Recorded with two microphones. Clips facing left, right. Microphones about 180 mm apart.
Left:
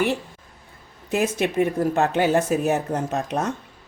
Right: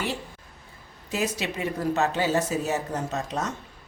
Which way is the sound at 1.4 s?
55° left (ahead or behind).